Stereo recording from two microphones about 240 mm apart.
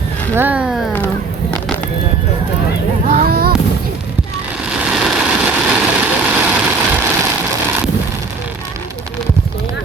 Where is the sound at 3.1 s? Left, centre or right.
Right.